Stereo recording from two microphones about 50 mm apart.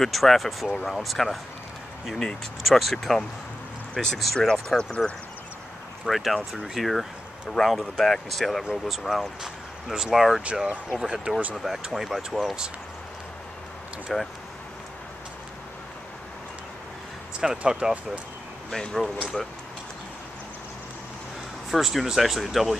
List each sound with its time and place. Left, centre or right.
0.0 s speech: centre
3.9 s speech: centre
6.0 s speech: centre
9.4 s speech: centre
10.4 s speech: right
11.5 s speech: centre
14.1 s speech: centre
17.4 s speech: centre
18.7 s speech: centre
21.6 s speech: centre